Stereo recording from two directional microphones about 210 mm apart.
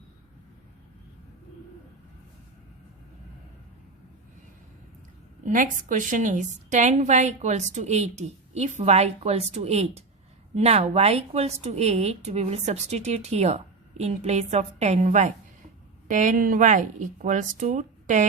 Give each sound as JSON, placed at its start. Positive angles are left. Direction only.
{"t": 5.5, "sound": "a woman's voice", "side_deg": -40}